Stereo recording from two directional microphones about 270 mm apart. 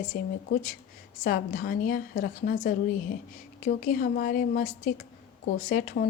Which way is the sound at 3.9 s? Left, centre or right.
Left.